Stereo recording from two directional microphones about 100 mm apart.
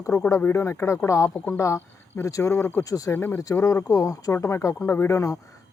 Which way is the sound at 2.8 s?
35° left (ahead or behind).